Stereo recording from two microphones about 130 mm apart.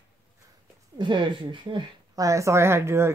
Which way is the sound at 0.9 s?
40° right (ahead or behind).